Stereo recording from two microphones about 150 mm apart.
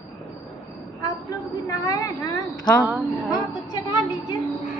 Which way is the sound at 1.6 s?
25° left (ahead or behind).